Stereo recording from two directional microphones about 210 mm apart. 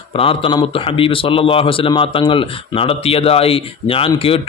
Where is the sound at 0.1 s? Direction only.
25° left (ahead or behind).